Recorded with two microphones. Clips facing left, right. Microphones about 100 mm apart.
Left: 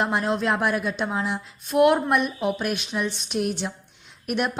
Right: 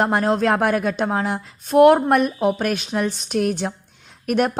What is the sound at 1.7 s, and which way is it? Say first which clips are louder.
A woman's voice: right 6 dB; 40° right (ahead or behind).